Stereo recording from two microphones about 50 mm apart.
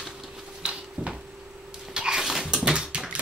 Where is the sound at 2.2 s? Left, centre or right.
Centre.